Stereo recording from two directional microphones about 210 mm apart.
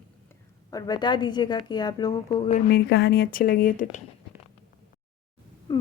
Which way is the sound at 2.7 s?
50° left (ahead or behind).